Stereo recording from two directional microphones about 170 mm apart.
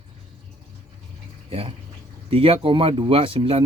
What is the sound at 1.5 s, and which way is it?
Speech, 35° right (ahead or behind).